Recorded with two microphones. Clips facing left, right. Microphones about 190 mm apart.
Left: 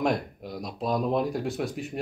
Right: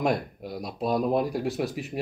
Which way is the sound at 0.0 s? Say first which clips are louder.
Even; centre (ahead or behind).